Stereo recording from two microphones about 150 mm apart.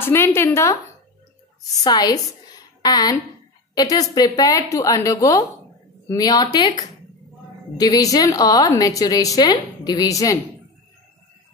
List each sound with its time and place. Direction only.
0.0 s a woman's voice: 15° left (ahead or behind)
1.8 s a woman's voice: 25° left (ahead or behind)
7.8 s a woman's voice: 25° left (ahead or behind)